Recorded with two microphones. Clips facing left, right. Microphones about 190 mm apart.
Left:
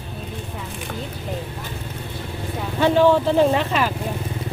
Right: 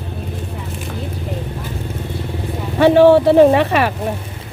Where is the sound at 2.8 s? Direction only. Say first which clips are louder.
Right 7 dB; 65° right (ahead or behind).